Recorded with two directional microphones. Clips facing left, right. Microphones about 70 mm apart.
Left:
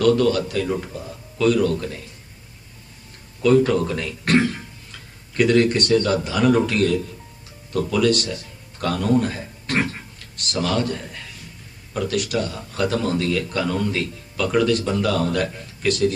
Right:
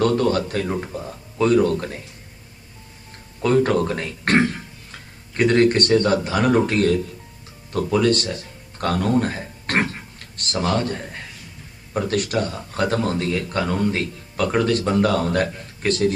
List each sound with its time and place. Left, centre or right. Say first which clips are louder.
0.0 s speech: left 1 dB; right
3.4 s a man's voice: left 1 dB; right